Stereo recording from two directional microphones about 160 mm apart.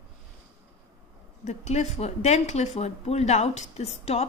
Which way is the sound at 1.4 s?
45° left (ahead or behind).